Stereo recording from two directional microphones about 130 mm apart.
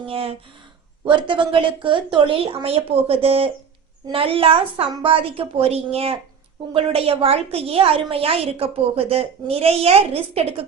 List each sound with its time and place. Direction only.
0.1 s a woman's voice: 45° right (ahead or behind)